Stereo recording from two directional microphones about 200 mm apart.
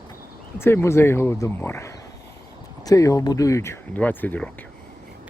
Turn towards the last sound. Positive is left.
turn(degrees=10)  # may be behind; listen again after turning